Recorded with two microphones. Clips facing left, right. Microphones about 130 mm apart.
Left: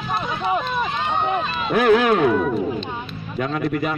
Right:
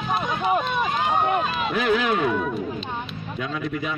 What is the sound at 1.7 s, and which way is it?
Speech, 55° left (ahead or behind).